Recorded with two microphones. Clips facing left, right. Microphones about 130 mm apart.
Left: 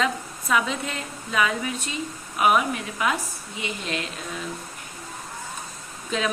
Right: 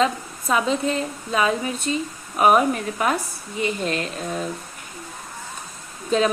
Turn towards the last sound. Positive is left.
turn(degrees=-35)  # may be behind; listen again after turning